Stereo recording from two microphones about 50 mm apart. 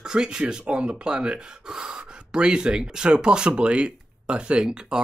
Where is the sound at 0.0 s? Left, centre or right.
Centre.